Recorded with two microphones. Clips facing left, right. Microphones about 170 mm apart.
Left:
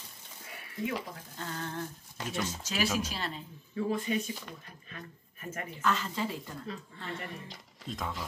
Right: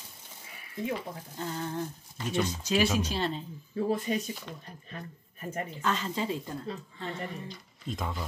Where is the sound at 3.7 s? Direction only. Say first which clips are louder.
Right 2 dB; 35° right (ahead or behind).